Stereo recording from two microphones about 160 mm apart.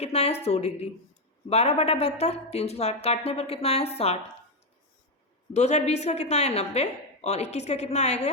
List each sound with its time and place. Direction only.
0.0 s speech: 40° left (ahead or behind)
5.5 s a woman's voice: 45° left (ahead or behind)